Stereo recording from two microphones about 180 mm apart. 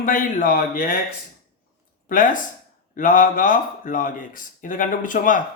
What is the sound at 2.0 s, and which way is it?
Speech, 45° left (ahead or behind).